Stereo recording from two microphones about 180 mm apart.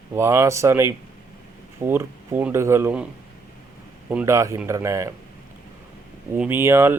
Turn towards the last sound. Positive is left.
turn(degrees=-15)  # may be behind; listen again after turning